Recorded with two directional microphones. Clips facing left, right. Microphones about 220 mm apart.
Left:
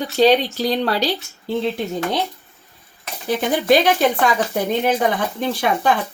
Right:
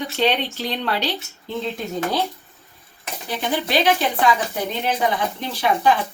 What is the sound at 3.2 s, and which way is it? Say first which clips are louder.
Speech: left 7 dB; 45° left (ahead or behind).